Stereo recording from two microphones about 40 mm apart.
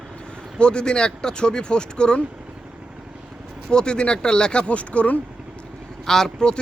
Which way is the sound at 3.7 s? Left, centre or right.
Left.